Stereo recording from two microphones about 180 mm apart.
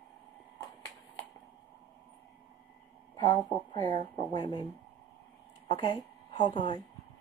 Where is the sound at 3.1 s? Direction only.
25° left (ahead or behind).